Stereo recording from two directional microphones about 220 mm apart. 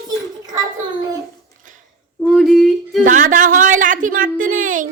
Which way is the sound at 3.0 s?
35° right (ahead or behind).